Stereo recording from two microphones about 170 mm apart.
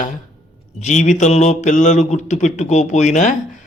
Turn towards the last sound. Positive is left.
turn(degrees=45)  # may be behind; listen again after turning